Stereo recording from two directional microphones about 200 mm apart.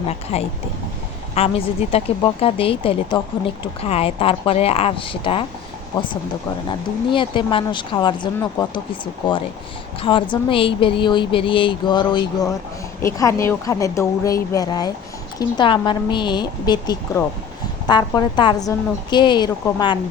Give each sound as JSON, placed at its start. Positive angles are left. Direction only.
{"t": 0.3, "sound": "speech", "side_deg": 30}
{"t": 7.1, "sound": "speech", "side_deg": 25}
{"t": 10.0, "sound": "speech", "side_deg": 25}